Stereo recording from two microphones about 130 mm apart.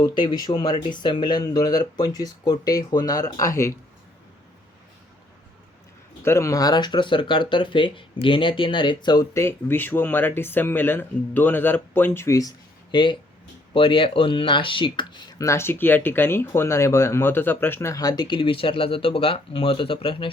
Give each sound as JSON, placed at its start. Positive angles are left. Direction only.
{"t": 0.0, "sound": "speech", "side_deg": 35}
{"t": 6.2, "sound": "speech", "side_deg": 20}
{"t": 9.3, "sound": "speech", "side_deg": 20}
{"t": 15.4, "sound": "speech", "side_deg": 20}